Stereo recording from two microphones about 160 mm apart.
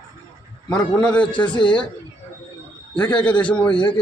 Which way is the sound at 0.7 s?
5° left (ahead or behind).